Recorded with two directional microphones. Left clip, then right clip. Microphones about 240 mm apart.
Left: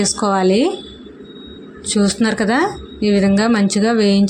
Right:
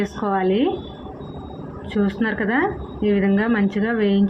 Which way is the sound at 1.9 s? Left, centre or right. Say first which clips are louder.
Left 5 dB; left.